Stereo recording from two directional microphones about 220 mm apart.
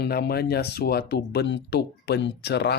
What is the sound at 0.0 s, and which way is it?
Speech, 45° left (ahead or behind).